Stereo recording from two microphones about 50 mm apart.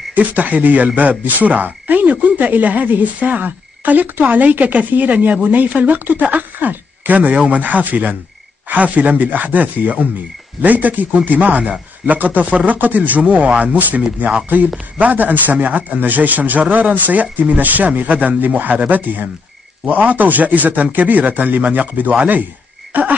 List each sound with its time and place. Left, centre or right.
0.1 s speech: right